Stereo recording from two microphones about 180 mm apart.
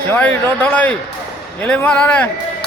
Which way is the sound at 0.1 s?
10° left (ahead or behind).